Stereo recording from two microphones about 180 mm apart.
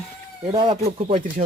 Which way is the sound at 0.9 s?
35° right (ahead or behind).